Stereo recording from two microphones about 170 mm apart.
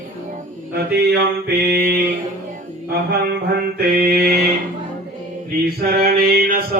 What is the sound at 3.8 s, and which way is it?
Mantra, 65° right (ahead or behind).